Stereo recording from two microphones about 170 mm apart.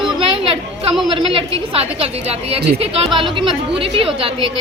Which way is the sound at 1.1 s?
30° right (ahead or behind).